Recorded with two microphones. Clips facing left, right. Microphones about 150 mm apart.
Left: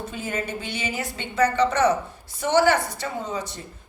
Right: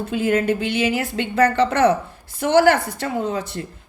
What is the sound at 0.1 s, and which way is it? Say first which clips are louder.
A woman's voice: right 14 dB; 60° right (ahead or behind).